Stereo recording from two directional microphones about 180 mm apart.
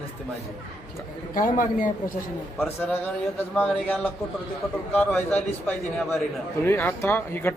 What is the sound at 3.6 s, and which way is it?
Speech, 10° left (ahead or behind).